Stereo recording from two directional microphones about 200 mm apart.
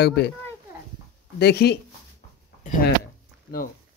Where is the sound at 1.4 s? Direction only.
55° left (ahead or behind).